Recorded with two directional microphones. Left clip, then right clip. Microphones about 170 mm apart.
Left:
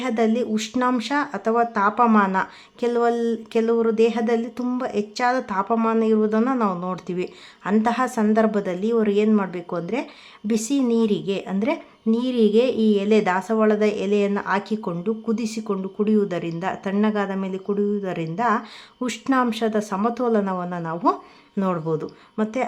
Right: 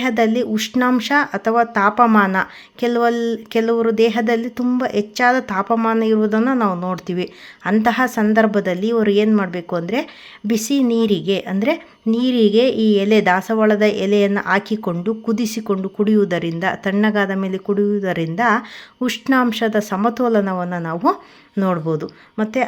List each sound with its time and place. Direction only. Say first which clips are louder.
0.0 s speech: right 5 dB; 20° right (ahead or behind)